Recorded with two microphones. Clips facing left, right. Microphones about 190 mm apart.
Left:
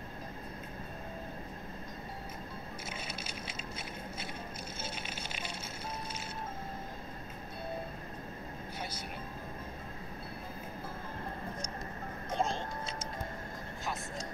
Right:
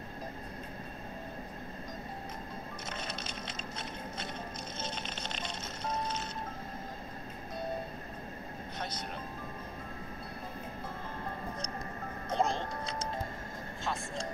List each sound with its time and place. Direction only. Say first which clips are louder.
2.9 s a sound: right 4 dB; 10° left (ahead or behind)
4.7 s music: right 2 dB; 10° left (ahead or behind)
12.4 s music: right 3 dB; 20° right (ahead or behind)